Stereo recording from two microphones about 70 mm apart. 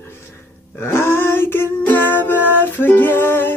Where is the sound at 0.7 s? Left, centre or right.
Left.